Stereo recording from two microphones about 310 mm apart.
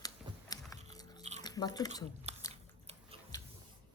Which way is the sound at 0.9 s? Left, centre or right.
Centre.